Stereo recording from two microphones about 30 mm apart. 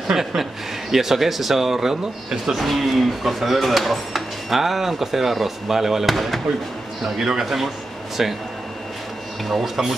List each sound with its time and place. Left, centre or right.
0.9 s speech: centre
2.6 s speech: centre
7.2 s a man's voice: centre
7.4 s speech: centre
9.5 s speech: centre